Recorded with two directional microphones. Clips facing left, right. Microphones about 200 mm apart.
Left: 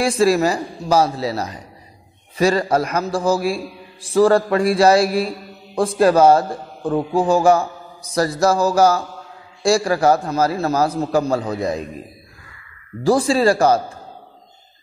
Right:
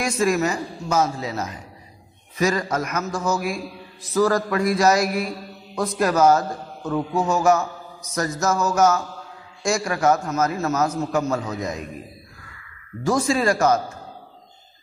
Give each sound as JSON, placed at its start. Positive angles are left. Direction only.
{"t": 0.0, "sound": "a man's voice", "side_deg": 30}
{"t": 13.0, "sound": "a man's voice", "side_deg": 30}